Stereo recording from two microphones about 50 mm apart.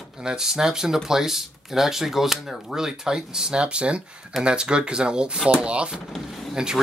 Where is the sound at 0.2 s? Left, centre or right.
Centre.